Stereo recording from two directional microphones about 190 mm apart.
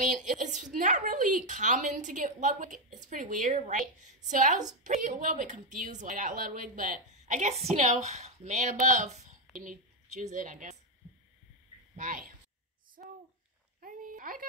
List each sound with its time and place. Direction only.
0.2 s a woman's voice: 40° right (ahead or behind)
12.0 s a woman's voice: 45° right (ahead or behind)
13.0 s a sound: 45° right (ahead or behind)